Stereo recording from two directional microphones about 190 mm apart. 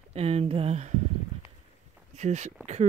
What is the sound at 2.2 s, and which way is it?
Speech, 35° right (ahead or behind).